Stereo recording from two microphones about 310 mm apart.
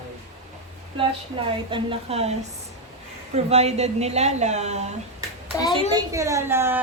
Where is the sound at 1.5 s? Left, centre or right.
Centre.